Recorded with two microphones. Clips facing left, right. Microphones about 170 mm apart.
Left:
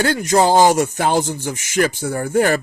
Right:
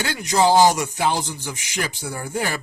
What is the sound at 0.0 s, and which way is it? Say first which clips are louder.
Speech: left 4 dB; 50° left (ahead or behind).